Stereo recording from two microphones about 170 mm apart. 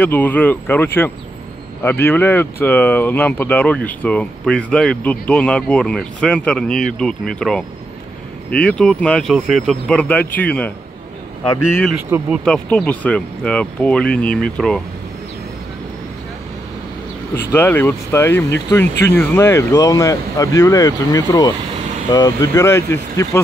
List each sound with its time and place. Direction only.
0.0 s speech: 10° left (ahead or behind)
12.1 s speech: 15° right (ahead or behind)
12.4 s speech: 5° left (ahead or behind)
17.5 s speech: 10° left (ahead or behind)